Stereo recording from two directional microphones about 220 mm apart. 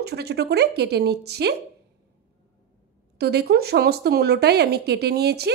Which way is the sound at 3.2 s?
45° right (ahead or behind).